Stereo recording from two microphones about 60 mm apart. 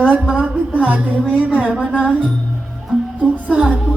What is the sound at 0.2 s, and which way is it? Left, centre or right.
Music, centre.